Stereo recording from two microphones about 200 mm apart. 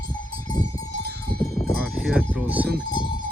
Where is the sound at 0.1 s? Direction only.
20° left (ahead or behind).